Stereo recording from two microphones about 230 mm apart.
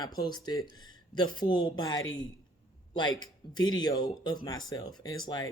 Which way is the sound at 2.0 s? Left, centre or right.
Left.